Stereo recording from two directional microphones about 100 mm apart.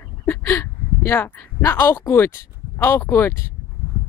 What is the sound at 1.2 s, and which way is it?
A woman's voice, 20° left (ahead or behind).